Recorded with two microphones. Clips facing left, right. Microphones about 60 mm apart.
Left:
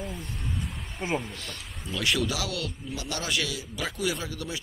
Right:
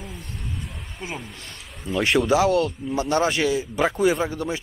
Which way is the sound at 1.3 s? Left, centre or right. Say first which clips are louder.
Even; right.